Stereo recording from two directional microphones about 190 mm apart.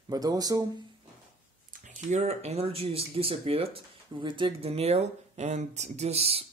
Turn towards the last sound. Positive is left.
turn(degrees=-30)  # may be behind; listen again after turning